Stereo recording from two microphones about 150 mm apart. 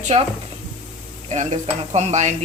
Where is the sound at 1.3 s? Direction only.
50° right (ahead or behind).